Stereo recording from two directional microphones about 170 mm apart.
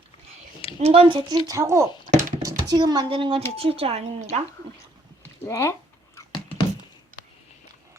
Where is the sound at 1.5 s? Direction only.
20° right (ahead or behind); by 4.4 s 40° right (ahead or behind).